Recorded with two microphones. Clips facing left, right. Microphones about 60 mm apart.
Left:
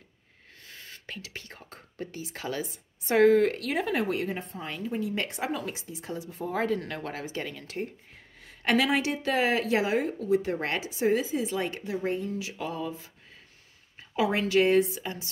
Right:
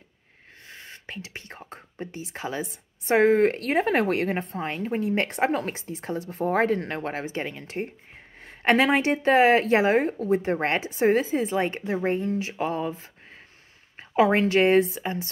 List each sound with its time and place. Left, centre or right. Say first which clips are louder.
0.7 s speech: right 3 dB; right